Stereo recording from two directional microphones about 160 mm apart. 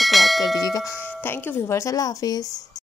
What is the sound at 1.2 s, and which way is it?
A woman's voice, 15° left (ahead or behind).